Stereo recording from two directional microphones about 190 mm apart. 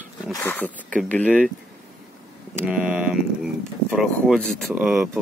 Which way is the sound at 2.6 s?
5° right (ahead or behind).